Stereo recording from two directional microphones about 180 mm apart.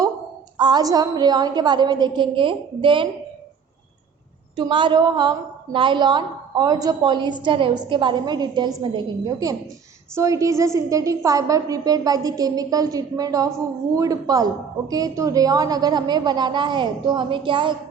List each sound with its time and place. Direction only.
0.5 s a woman's voice: 25° right (ahead or behind)
4.5 s a woman's voice: 25° right (ahead or behind)